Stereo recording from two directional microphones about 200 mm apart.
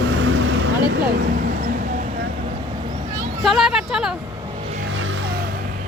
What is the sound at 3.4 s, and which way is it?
Speech, centre (ahead or behind).